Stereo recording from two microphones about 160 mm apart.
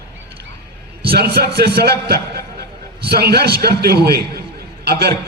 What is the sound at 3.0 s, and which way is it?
A man's voice, 80° right.